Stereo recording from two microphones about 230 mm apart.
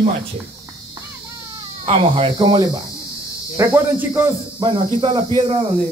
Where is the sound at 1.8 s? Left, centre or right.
Centre.